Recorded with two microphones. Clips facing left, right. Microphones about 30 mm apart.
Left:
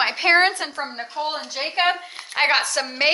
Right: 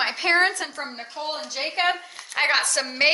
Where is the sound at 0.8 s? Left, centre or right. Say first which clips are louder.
Left 5 dB; centre.